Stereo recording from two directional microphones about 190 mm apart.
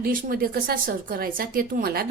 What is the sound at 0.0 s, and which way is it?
Speech, 50° right (ahead or behind).